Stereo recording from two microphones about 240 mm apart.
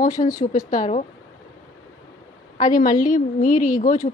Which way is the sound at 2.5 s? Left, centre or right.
Left.